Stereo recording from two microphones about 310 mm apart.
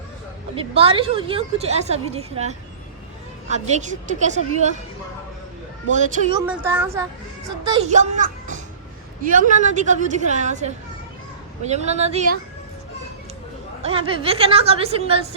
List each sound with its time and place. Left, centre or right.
0.7 s a woman's voice: centre
5.9 s a woman's voice: right
6.4 s speech: centre
7.6 s a woman's voice: centre
13.8 s a woman's voice: centre